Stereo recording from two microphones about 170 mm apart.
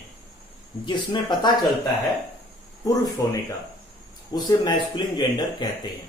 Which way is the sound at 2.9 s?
20° left (ahead or behind).